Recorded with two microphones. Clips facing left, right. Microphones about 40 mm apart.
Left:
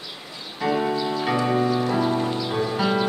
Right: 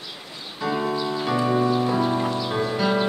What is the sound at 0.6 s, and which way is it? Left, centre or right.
Music, centre.